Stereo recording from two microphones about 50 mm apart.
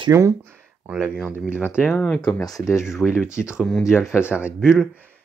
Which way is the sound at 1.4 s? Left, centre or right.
Right.